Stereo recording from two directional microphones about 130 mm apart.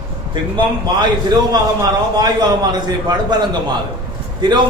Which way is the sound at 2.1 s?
30° right (ahead or behind).